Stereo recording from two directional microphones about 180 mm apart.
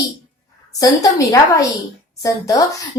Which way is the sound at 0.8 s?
20° left (ahead or behind).